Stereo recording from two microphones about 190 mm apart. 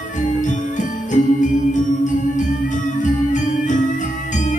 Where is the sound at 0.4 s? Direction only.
40° left (ahead or behind).